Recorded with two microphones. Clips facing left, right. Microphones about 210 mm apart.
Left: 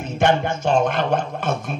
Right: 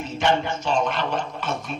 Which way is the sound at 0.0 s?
50° left (ahead or behind).